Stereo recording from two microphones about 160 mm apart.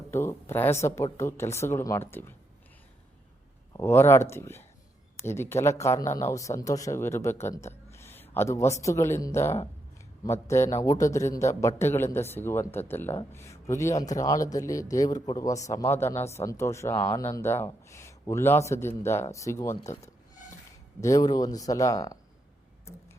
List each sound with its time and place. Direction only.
0.1 s a man's voice: 15° left (ahead or behind)
3.7 s a man's voice: 15° left (ahead or behind)
21.0 s speech: 20° left (ahead or behind)